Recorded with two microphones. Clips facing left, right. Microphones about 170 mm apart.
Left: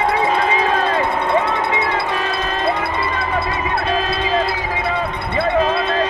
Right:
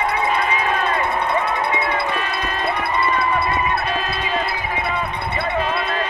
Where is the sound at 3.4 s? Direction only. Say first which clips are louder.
Left 1 dB; 90° left.